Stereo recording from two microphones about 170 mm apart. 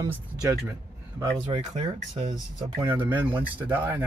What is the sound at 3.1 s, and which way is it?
Speech, 10° right (ahead or behind).